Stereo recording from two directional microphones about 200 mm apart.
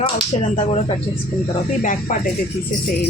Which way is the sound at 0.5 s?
35° left (ahead or behind).